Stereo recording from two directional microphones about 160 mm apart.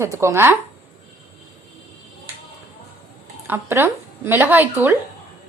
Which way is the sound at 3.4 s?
15° right (ahead or behind).